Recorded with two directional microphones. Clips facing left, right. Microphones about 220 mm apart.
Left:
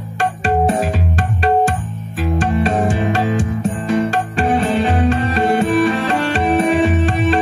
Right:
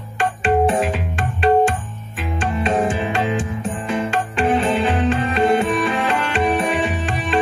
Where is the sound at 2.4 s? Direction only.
40° left (ahead or behind).